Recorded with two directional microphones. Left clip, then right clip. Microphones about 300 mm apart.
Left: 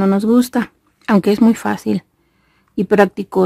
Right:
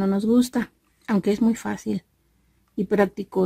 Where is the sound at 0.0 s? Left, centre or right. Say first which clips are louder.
Left 7 dB; centre.